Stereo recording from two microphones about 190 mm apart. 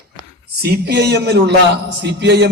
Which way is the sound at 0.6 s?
60° right (ahead or behind).